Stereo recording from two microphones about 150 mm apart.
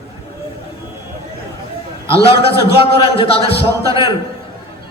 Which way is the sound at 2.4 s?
35° left (ahead or behind).